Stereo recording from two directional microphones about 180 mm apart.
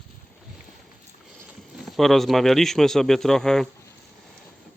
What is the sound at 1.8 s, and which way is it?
Speech, centre (ahead or behind).